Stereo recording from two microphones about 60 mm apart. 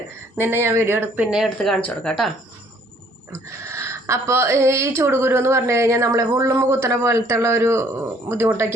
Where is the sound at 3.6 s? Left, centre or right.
Right.